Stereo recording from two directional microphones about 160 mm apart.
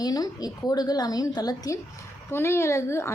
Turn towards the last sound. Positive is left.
turn(degrees=15)  # may be behind; listen again after turning